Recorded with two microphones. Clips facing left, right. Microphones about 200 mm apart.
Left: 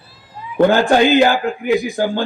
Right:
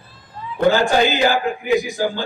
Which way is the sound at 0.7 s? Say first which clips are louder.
Left 1 dB; 55° left (ahead or behind).